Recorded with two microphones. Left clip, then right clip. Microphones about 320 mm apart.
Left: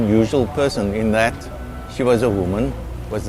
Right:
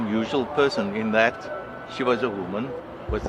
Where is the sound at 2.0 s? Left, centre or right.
Left.